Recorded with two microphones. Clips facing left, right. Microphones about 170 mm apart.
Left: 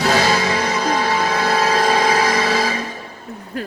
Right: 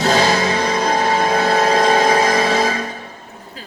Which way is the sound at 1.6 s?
25° right (ahead or behind).